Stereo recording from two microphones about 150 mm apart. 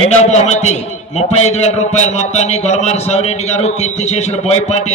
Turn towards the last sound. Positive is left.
turn(degrees=50)  # may be behind; listen again after turning